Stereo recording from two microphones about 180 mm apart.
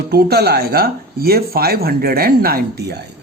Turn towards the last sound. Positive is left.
turn(degrees=-65)  # may be behind; listen again after turning